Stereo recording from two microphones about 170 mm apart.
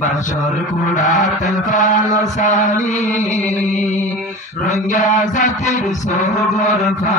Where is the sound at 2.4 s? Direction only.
45° left (ahead or behind).